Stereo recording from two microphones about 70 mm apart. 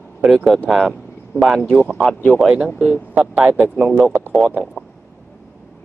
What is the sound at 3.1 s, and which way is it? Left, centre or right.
Speech, centre.